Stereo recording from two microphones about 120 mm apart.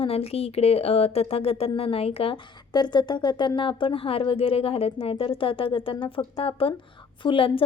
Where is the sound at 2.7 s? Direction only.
35° left (ahead or behind).